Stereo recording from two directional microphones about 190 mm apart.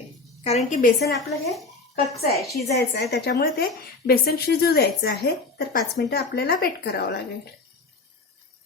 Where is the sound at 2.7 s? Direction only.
60° left (ahead or behind).